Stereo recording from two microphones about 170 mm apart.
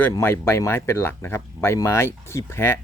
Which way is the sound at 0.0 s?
15° left (ahead or behind).